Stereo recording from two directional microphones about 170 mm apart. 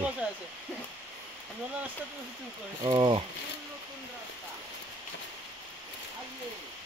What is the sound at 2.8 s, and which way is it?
Speech, 25° right (ahead or behind).